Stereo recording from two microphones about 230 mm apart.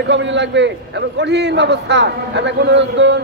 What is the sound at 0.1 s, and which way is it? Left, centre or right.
A man's voice, right.